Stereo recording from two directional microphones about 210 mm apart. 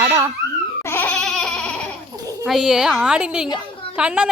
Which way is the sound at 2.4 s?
Centre (ahead or behind).